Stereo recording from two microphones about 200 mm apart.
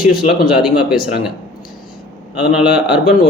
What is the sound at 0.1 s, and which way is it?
Speech, 50° left (ahead or behind).